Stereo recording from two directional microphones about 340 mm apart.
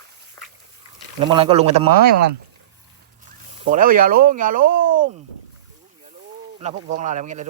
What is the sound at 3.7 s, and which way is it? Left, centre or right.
Speech, right.